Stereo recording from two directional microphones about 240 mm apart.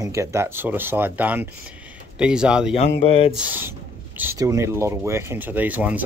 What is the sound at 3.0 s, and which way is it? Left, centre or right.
Speech, left.